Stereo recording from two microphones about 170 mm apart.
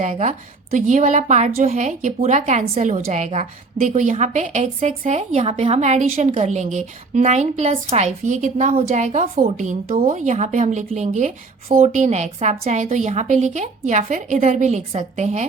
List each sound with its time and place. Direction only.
0.0 s a woman's voice: 45° right (ahead or behind)